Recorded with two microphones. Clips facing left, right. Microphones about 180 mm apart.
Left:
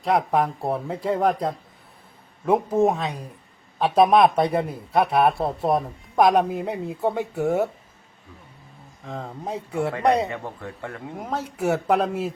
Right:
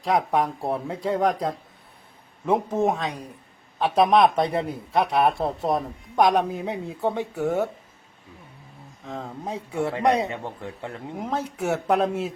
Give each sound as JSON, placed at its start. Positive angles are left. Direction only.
{"t": 0.0, "sound": "a man's voice", "side_deg": 0}
{"t": 9.0, "sound": "a man's voice", "side_deg": 0}
{"t": 10.2, "sound": "a man's voice", "side_deg": -20}
{"t": 11.2, "sound": "a man's voice", "side_deg": 0}